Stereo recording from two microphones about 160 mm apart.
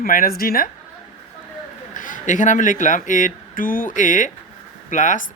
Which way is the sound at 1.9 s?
55° left (ahead or behind).